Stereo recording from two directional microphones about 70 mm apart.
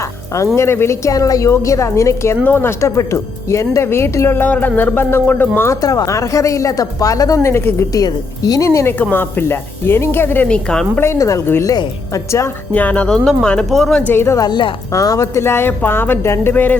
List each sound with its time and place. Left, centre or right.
0.5 s a woman's voice: left
4.4 s a sound: left
5.8 s a woman's voice: left
7.9 s a woman's voice: left
8.6 s speech: left
9.0 s speech: left
10.5 s speech: centre
11.2 s a woman's voice: left
12.7 s speech: left; by 14.0 s centre
14.1 s speech: left
14.3 s a woman's voice: left
14.9 s a woman's voice: left
15.4 s speech: left